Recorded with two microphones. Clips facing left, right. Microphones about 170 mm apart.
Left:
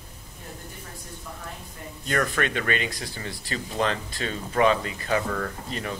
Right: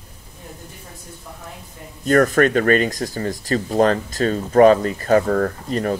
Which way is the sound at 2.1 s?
45° right (ahead or behind).